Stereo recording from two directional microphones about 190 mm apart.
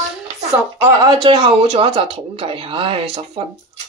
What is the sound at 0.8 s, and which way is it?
Speech, 20° right (ahead or behind).